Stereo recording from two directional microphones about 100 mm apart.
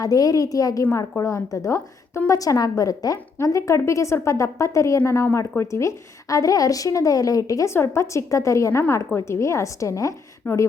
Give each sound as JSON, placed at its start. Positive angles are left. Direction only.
{"t": 0.0, "sound": "a woman's voice", "side_deg": 35}
{"t": 0.9, "sound": "a woman's voice", "side_deg": 20}
{"t": 1.2, "sound": "a woman's voice", "side_deg": 35}